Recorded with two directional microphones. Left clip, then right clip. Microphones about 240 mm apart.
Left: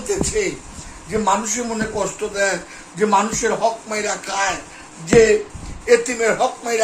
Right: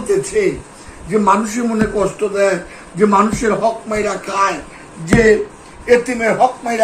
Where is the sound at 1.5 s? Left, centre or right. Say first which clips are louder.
Right 5 dB; centre.